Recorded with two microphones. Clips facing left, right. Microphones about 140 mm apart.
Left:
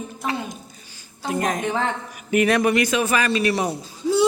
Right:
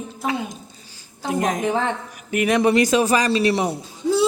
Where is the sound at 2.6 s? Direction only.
35° right (ahead or behind).